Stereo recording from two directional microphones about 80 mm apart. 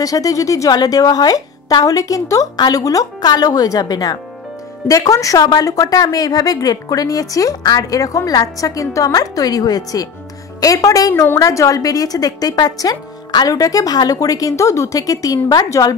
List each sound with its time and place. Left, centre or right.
0.0 s a woman's voice: left
4.8 s a woman's voice: left